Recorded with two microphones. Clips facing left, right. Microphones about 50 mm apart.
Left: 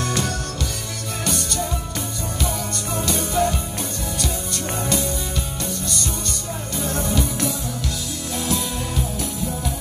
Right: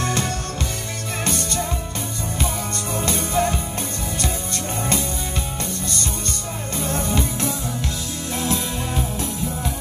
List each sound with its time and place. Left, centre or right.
0.0 s music: right
3.0 s music: right
6.8 s music: right